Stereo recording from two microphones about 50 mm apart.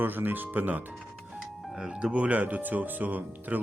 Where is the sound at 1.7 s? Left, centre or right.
Centre.